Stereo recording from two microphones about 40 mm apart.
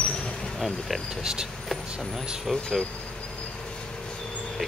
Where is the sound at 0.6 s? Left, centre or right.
Centre.